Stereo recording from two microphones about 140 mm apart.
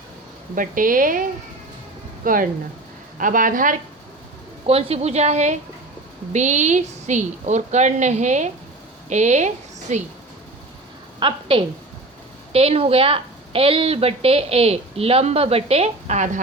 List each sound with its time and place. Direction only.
0.5 s a woman's voice: 75° right (ahead or behind)
2.2 s a woman's voice: 80° right
4.6 s a woman's voice: 45° right (ahead or behind)
11.2 s a woman's voice: 35° right (ahead or behind); by 16.4 s 60° right (ahead or behind)